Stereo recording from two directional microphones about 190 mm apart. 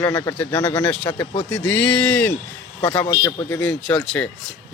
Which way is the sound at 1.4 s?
5° left (ahead or behind).